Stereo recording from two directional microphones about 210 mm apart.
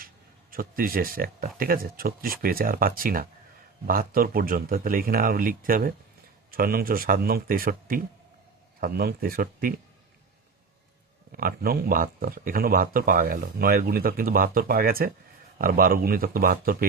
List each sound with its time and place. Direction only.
0.5 s speech: 45° right (ahead or behind)
11.3 s speech: 45° right (ahead or behind)